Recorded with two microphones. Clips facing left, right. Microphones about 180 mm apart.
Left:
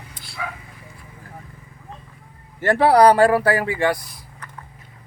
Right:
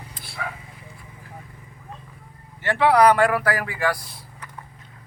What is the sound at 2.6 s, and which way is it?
Speech, 40° left (ahead or behind).